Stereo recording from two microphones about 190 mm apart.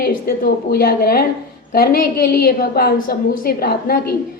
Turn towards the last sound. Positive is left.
turn(degrees=50)  # may be behind; listen again after turning